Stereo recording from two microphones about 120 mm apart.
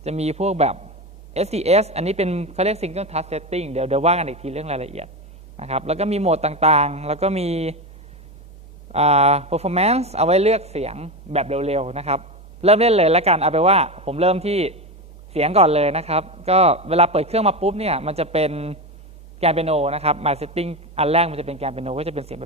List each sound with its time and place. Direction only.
0.0 s speech: 65° right (ahead or behind)
8.9 s speech: 60° right (ahead or behind)